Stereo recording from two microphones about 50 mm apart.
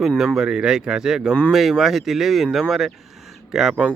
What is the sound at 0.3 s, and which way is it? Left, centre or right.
Speech, centre.